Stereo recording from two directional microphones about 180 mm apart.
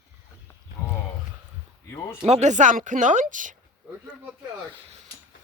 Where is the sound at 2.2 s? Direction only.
40° right (ahead or behind).